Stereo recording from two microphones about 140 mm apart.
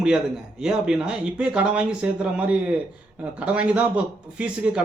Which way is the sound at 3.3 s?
10° right (ahead or behind).